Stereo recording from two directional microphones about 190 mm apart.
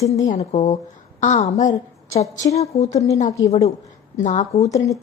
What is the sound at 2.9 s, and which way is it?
Speech, 15° left (ahead or behind).